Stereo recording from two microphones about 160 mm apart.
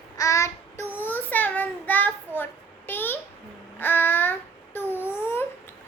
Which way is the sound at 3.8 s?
10° left (ahead or behind).